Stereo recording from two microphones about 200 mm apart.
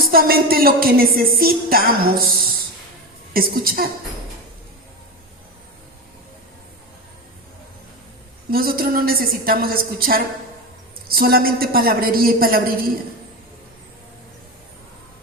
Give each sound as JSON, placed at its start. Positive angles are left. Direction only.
{"t": 0.1, "sound": "a woman's voice", "side_deg": -50}
{"t": 8.4, "sound": "a woman's voice", "side_deg": -45}